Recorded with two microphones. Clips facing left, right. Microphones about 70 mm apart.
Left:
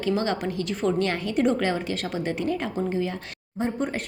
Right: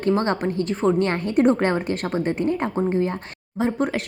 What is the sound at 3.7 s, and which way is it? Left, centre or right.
Speech, right.